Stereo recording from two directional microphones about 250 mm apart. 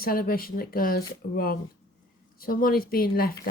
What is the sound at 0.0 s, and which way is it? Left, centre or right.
Speech, left.